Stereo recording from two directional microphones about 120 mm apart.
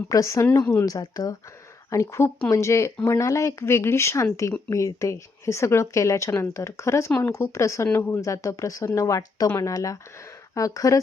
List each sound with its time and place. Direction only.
0.1 s speech: 25° left (ahead or behind)
0.4 s a woman's voice: 15° left (ahead or behind)
0.9 s speech: 30° left (ahead or behind)